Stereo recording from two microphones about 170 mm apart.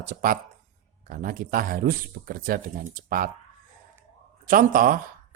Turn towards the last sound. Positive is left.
turn(degrees=-55)  # may be behind; listen again after turning